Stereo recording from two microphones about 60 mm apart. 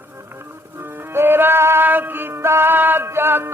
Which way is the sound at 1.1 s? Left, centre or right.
Right.